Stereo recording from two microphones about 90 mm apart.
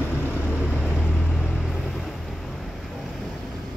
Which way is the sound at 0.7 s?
5° right (ahead or behind).